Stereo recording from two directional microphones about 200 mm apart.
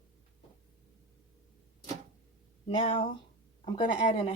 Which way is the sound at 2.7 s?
25° left (ahead or behind).